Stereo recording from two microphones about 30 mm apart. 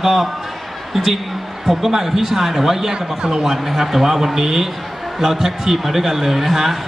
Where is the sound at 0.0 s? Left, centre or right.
Centre.